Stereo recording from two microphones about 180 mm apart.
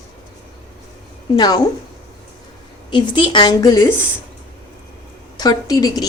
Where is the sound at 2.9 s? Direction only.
25° left (ahead or behind).